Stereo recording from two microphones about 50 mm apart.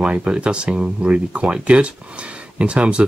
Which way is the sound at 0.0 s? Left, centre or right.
Right.